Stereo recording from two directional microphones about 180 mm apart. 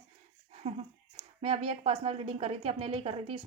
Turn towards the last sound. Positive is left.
turn(degrees=-35)  # may be behind; listen again after turning